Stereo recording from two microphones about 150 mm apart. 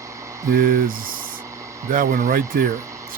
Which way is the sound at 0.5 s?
60° right (ahead or behind).